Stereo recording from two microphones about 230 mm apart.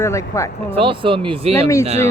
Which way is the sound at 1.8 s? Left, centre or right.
Right.